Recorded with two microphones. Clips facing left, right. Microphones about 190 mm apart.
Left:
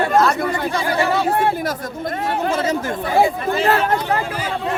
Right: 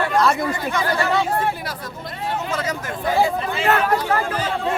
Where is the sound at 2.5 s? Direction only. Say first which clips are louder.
Left 6 dB; 25° left (ahead or behind).